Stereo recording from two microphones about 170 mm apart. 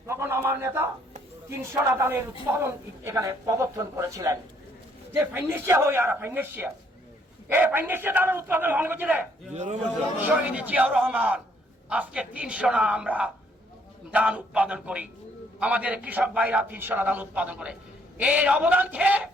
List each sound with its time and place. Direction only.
0.1 s a man's voice: 15° right (ahead or behind)